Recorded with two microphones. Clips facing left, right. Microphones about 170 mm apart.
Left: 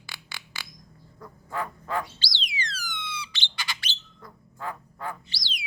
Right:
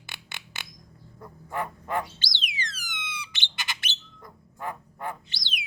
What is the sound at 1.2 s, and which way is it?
Bird, 20° right (ahead or behind).